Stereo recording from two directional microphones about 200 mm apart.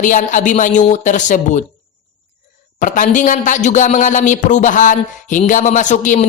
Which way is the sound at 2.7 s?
40° left (ahead or behind).